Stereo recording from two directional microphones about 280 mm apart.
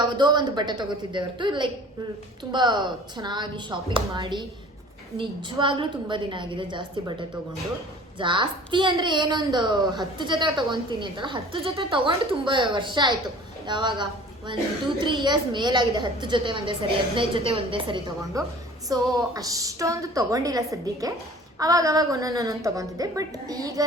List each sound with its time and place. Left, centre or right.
0.2 s a woman's voice: centre